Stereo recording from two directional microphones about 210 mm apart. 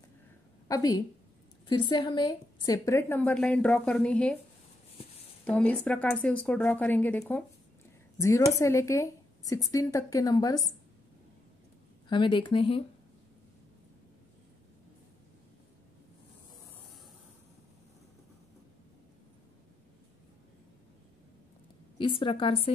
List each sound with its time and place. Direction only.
0.7 s a woman's voice: 15° left (ahead or behind)
5.4 s a woman's voice: 5° left (ahead or behind)
8.5 s a woman's voice: 15° left (ahead or behind)
12.1 s speech: 25° left (ahead or behind)
21.9 s a woman's voice: 25° left (ahead or behind)